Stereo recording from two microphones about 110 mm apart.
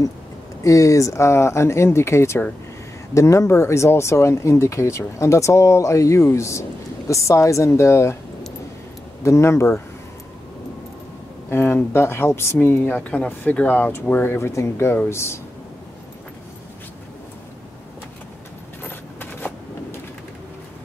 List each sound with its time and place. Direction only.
0.7 s speech: 30° left (ahead or behind)
9.2 s speech: 25° left (ahead or behind)
11.5 s speech: 20° left (ahead or behind)
19.1 s a sound: 20° left (ahead or behind)